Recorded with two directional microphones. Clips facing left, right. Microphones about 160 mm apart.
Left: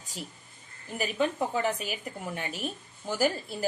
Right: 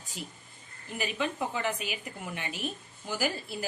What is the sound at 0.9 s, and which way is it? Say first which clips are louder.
A woman's voice: left 4 dB; 40° left (ahead or behind).